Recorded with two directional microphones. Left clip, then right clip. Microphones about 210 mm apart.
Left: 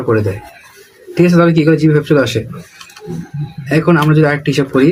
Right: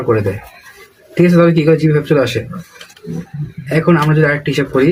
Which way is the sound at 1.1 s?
25° left (ahead or behind).